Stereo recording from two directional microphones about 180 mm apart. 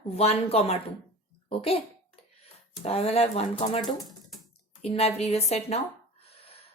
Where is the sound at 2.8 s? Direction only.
35° left (ahead or behind).